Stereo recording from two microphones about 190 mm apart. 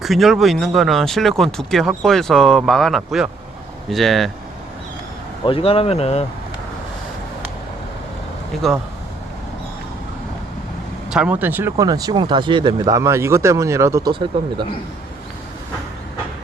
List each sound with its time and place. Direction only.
0.0 s speech: centre (ahead or behind)
5.5 s speech: 30° left (ahead or behind)
8.6 s speech: centre (ahead or behind)
11.1 s speech: 5° right (ahead or behind); by 14.3 s 20° right (ahead or behind)